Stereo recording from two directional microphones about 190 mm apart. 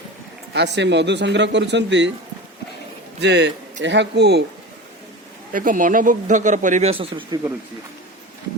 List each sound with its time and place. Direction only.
0.5 s speech: 65° right (ahead or behind)
3.2 s speech: 65° right (ahead or behind)
5.5 s speech: 45° right (ahead or behind); by 7.3 s 30° right (ahead or behind)